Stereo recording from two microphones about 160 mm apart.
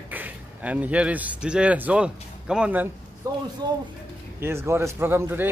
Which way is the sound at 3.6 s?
25° right (ahead or behind).